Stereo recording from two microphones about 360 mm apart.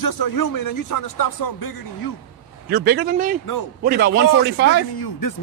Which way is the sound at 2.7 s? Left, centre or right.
Right.